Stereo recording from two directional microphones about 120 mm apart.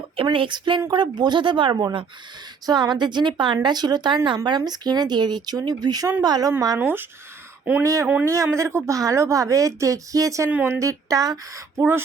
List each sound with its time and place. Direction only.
0.2 s speech: 45° right (ahead or behind)
6.7 s speech: 15° right (ahead or behind)
8.0 s speech: 15° right (ahead or behind)
8.3 s speech: 25° right (ahead or behind)
11.8 s speech: 20° right (ahead or behind)